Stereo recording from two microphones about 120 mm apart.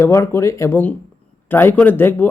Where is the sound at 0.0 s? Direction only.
25° left (ahead or behind).